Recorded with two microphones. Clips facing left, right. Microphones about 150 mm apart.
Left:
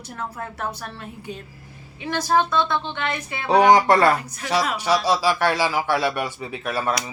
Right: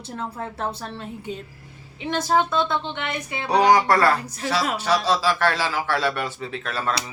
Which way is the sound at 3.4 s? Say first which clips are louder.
Left 2 dB; 25° left (ahead or behind).